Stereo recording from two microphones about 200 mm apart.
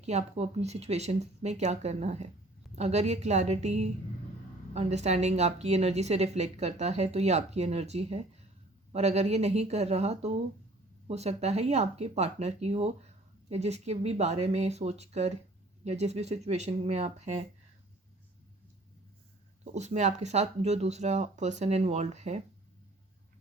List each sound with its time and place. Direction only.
0.0 s a woman's voice: 35° right (ahead or behind)
19.7 s a woman's voice: 35° right (ahead or behind)